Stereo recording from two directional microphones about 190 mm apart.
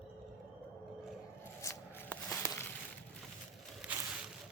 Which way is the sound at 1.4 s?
15° left (ahead or behind).